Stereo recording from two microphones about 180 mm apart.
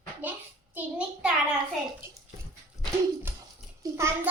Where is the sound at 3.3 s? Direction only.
15° right (ahead or behind).